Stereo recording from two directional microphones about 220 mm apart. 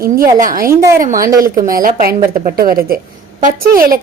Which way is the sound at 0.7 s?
15° right (ahead or behind).